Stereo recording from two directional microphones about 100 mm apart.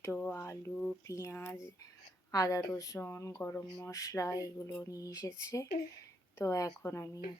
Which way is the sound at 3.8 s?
30° left (ahead or behind).